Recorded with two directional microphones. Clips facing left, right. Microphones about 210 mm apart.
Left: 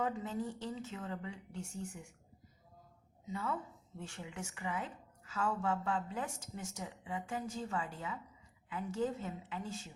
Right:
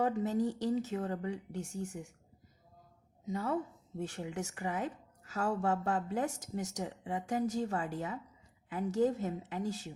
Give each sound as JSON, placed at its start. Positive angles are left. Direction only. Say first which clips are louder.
{"t": 0.0, "sound": "speech", "louder": "right 6 dB", "side_deg": -40}
{"t": 3.2, "sound": "speech", "louder": "right 5 dB", "side_deg": -40}